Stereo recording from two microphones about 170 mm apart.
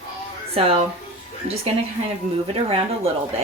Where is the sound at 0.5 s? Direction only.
35° right (ahead or behind).